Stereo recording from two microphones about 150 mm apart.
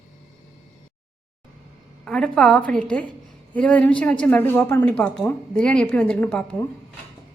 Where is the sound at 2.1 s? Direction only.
5° left (ahead or behind).